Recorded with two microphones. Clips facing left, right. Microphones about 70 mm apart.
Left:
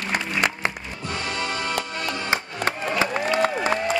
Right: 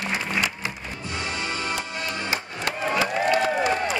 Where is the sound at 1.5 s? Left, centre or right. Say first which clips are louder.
Left 2 dB; left.